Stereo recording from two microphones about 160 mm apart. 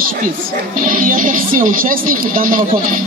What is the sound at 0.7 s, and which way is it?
Speech, 60° right (ahead or behind).